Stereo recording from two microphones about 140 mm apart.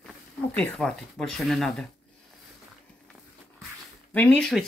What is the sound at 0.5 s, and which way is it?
Speech, 5° left (ahead or behind).